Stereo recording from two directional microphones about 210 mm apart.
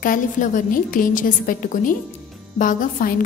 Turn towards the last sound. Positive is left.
turn(degrees=40)  # may be behind; listen again after turning